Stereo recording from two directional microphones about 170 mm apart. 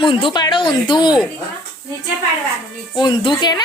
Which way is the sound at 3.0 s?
25° left (ahead or behind).